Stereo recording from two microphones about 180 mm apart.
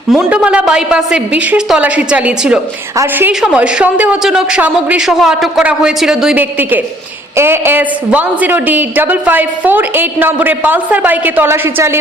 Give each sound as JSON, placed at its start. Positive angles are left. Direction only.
{"t": 0.2, "sound": "a woman's voice", "side_deg": -5}